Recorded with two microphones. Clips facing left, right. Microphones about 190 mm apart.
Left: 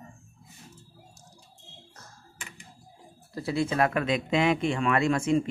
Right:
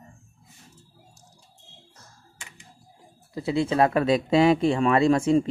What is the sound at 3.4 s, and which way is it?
Speech, 25° right (ahead or behind).